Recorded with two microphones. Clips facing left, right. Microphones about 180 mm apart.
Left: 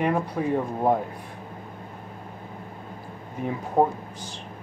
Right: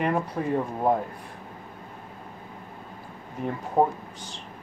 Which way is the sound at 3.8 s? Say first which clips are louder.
Left 1 dB; centre (ahead or behind).